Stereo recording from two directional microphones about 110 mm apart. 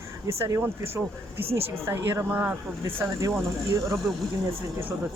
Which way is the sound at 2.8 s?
30° right (ahead or behind).